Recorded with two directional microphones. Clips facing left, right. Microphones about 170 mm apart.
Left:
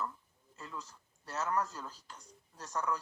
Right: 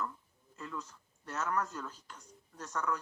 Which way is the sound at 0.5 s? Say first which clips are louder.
Right 4 dB; 30° left (ahead or behind).